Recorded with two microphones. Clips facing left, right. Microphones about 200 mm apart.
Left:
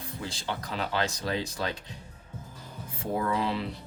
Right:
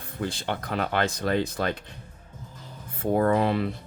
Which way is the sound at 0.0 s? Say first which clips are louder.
Right 6 dB; 55° right (ahead or behind).